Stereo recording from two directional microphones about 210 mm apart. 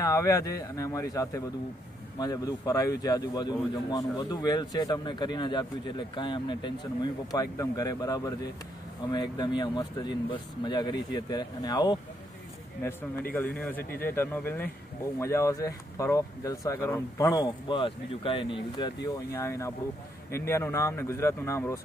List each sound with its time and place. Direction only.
0.0 s a man's voice: 15° left (ahead or behind)
13.3 s a man's voice: 5° left (ahead or behind)